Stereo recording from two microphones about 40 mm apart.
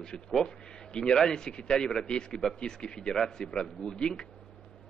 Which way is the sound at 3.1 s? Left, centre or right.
Centre.